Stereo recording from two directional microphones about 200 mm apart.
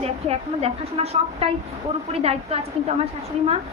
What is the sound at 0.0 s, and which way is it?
A woman's voice, 30° right (ahead or behind).